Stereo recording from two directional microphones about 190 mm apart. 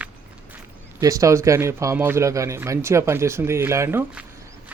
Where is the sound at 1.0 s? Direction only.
15° right (ahead or behind).